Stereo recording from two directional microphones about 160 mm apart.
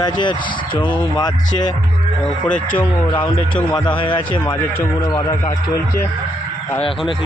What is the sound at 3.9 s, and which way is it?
Speech, 30° left (ahead or behind).